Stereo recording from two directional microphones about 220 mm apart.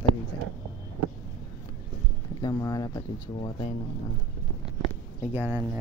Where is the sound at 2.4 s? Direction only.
15° left (ahead or behind).